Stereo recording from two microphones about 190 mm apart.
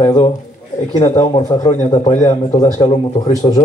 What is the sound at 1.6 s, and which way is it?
Speech, 35° left (ahead or behind).